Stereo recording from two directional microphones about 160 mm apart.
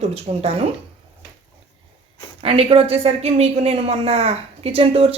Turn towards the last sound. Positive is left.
turn(degrees=-40)  # may be behind; listen again after turning